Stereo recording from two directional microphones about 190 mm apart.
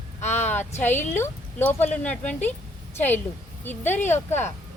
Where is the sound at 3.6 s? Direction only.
10° left (ahead or behind).